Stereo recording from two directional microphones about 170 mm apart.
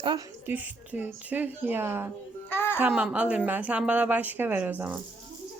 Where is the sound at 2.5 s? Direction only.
15° left (ahead or behind).